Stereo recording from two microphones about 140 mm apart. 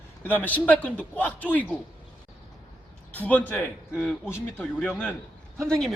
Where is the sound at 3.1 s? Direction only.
10° left (ahead or behind).